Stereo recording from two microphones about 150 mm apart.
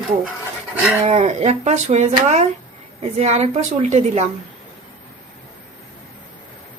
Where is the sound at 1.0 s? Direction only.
45° right (ahead or behind).